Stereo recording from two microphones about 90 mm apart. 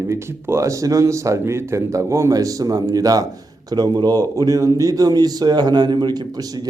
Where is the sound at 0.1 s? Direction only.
30° right (ahead or behind).